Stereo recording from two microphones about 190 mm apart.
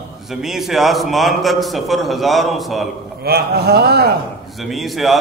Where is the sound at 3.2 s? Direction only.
55° right (ahead or behind).